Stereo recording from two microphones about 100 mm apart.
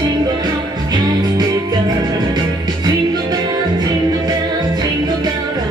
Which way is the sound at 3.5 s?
40° right (ahead or behind).